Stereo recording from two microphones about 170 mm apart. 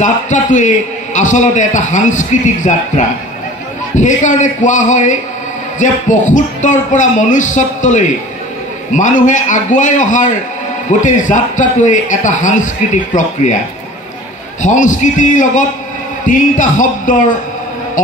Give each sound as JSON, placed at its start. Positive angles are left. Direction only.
{"t": 0.0, "sound": "a man's voice", "side_deg": 45}
{"t": 14.6, "sound": "a man's voice", "side_deg": 50}